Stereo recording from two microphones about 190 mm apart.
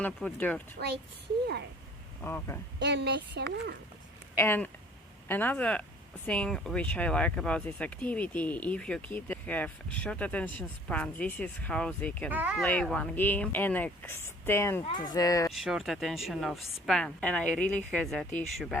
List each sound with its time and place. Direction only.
0.0 s speech: 5° left (ahead or behind)
2.2 s speech: 10° left (ahead or behind)
2.7 s a woman's voice: 65° right (ahead or behind)
4.4 s speech: 10° left (ahead or behind)
12.3 s speech: 5° right (ahead or behind)
12.6 s speech: 5° left (ahead or behind)
15.6 s a woman's voice: centre (ahead or behind)